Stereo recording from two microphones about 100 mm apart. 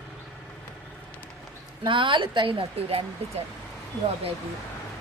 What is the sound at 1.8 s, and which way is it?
A woman's voice, 55° right (ahead or behind).